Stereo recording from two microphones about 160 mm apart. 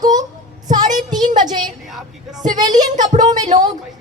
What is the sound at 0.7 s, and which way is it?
Child singing, 25° right (ahead or behind).